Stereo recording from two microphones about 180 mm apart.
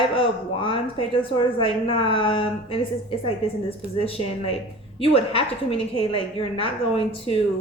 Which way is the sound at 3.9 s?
30° left (ahead or behind).